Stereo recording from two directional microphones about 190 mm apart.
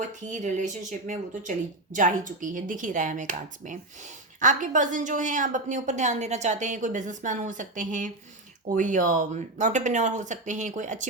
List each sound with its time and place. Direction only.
0.0 s speech: 40° right (ahead or behind)